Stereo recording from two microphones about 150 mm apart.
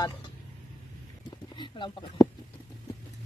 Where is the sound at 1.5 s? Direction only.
30° left (ahead or behind).